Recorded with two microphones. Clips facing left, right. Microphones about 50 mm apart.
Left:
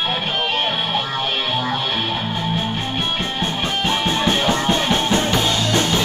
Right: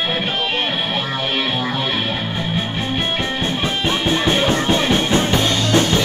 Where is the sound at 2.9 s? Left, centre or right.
Right.